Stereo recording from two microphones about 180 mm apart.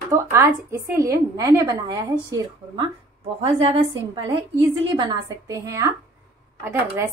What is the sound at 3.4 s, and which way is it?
A woman's voice, 30° right (ahead or behind).